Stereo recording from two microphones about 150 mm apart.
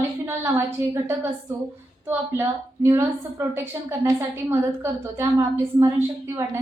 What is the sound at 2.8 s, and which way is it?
A woman's voice, 20° right (ahead or behind).